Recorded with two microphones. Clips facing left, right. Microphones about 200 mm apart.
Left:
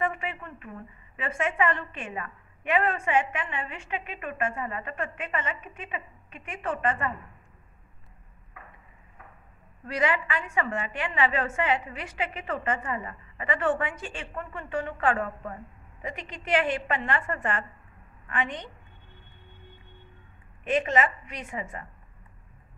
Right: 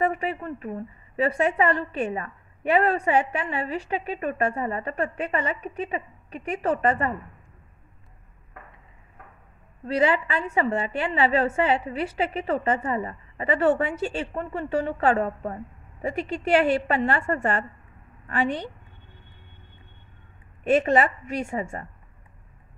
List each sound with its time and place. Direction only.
0.0 s a woman's voice: 35° right (ahead or behind)
9.8 s a woman's voice: 30° right (ahead or behind)
20.7 s a woman's voice: 40° right (ahead or behind)